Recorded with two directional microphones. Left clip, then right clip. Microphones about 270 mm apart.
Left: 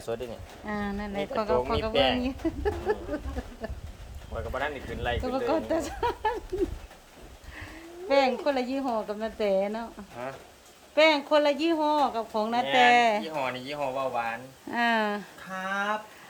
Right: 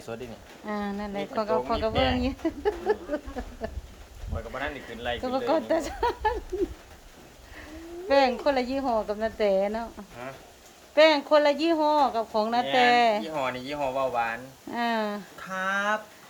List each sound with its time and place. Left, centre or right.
0.1 s speech: left
0.6 s speech: centre
1.9 s speech: left
2.2 s speech: centre
3.6 s a sound: centre
4.4 s a sound: left
5.2 s speech: centre
8.0 s speech: centre
10.9 s speech: centre